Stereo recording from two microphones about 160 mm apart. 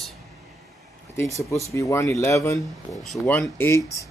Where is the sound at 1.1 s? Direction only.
15° left (ahead or behind).